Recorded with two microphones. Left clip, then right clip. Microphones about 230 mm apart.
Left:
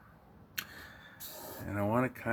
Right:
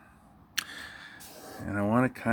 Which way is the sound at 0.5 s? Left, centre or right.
Right.